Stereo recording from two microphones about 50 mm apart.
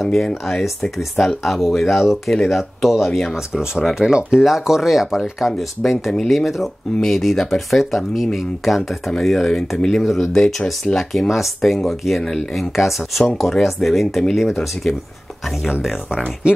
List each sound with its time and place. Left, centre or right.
0.0 s speech: centre
10.0 s speech: centre
10.9 s speech: centre
11.2 s speech: centre